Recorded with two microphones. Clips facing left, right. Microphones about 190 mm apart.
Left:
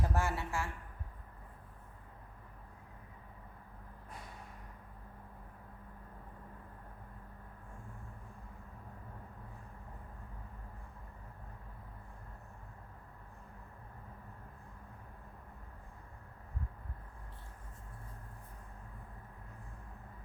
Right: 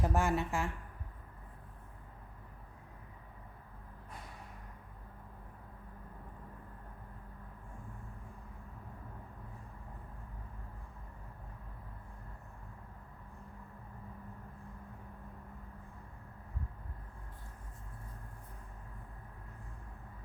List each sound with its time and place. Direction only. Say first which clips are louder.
0.0 s a woman's voice: right 4 dB; 15° right (ahead or behind)